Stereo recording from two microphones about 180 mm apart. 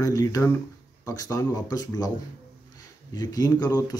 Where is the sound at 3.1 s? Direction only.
20° left (ahead or behind).